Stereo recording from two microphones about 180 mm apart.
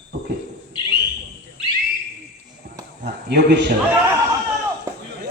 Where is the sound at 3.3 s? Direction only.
70° right (ahead or behind).